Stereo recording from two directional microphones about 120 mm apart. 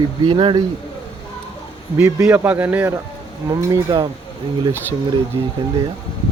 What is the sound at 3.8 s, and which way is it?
Speech, 40° right (ahead or behind).